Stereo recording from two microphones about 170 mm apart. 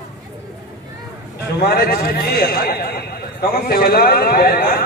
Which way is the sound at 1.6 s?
60° left (ahead or behind).